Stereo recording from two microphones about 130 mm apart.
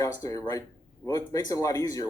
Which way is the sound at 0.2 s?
25° left (ahead or behind).